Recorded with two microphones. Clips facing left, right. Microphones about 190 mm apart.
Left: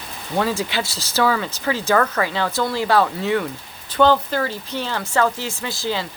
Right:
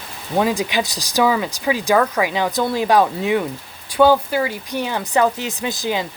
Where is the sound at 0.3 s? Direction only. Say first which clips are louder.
Right 3 dB; 15° right (ahead or behind).